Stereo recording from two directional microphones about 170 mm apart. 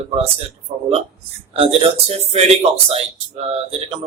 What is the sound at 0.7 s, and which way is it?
Speech, 35° right (ahead or behind).